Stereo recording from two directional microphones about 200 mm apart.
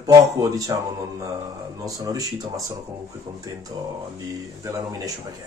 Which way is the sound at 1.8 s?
15° right (ahead or behind).